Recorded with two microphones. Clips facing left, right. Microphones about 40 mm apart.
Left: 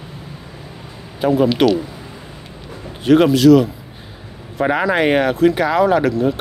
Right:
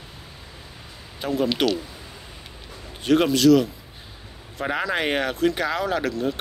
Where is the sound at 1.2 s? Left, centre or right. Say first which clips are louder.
Left 8 dB; centre.